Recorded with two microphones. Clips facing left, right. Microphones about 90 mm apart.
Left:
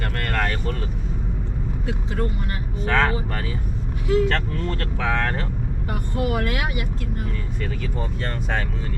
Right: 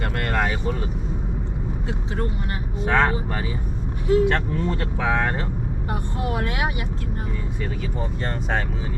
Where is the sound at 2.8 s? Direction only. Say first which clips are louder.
Right 1 dB; 10° right (ahead or behind).